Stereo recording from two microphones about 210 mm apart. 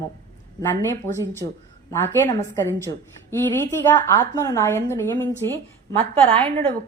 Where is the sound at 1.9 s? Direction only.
10° left (ahead or behind).